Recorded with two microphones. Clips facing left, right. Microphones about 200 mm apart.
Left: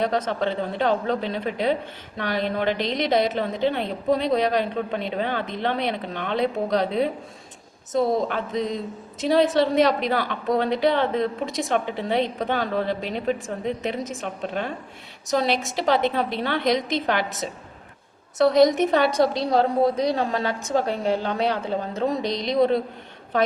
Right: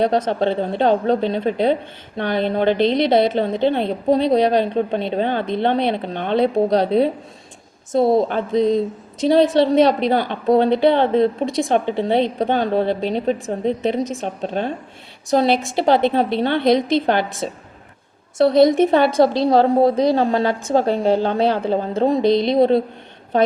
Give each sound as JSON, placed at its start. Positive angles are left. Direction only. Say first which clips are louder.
{"t": 0.0, "sound": "a woman's voice", "louder": "right 6 dB", "side_deg": -30}